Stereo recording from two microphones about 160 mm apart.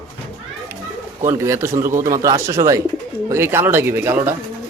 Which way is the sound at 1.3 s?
15° right (ahead or behind).